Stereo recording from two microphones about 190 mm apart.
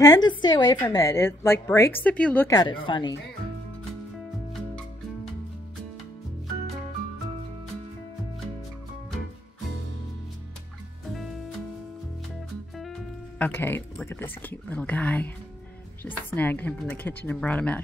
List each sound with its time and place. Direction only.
0.0 s a woman's voice: 20° left (ahead or behind)
4.5 s music: centre (ahead or behind)
13.4 s a woman's voice: 10° left (ahead or behind)